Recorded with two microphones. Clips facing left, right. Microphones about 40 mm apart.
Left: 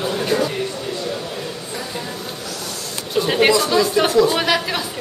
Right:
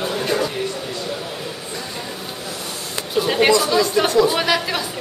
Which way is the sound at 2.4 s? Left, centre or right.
Right.